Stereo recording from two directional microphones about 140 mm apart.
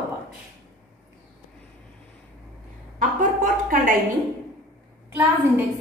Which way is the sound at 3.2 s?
65° right (ahead or behind).